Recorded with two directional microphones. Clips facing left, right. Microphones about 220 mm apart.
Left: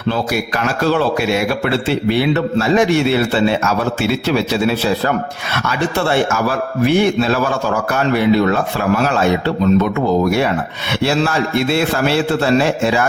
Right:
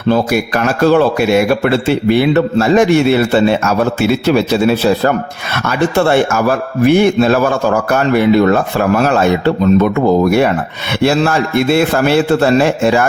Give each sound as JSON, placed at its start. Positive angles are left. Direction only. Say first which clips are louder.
{"t": 0.1, "sound": "a man's voice", "louder": "right 6 dB", "side_deg": -50}
{"t": 9.8, "sound": "a man's voice", "louder": "right 4 dB", "side_deg": -50}